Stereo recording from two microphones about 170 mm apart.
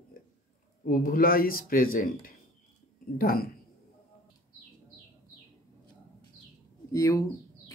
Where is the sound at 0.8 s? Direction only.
55° left (ahead or behind).